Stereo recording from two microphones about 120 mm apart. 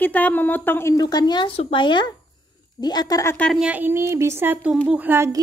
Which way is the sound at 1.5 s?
50° left (ahead or behind).